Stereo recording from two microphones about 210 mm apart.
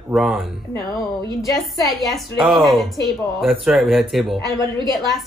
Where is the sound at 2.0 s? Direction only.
Centre (ahead or behind).